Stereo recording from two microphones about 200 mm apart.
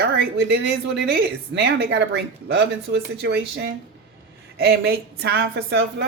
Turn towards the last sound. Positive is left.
turn(degrees=-60)  # may be behind; listen again after turning